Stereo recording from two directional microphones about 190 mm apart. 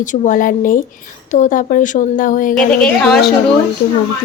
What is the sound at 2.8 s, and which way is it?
Speech, centre (ahead or behind).